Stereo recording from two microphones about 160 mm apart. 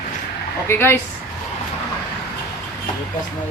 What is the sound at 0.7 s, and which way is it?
Speech, 15° left (ahead or behind).